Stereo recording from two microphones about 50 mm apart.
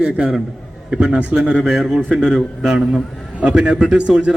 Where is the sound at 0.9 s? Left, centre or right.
Right.